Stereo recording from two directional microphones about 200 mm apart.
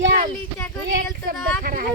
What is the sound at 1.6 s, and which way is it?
Speech, 45° right (ahead or behind).